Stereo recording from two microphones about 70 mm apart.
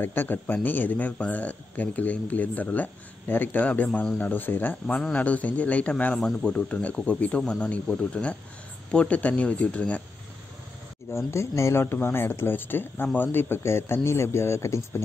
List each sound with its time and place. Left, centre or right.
0.0 s speech: left
4.8 s speech: centre
7.4 s speech: centre
11.1 s speech: left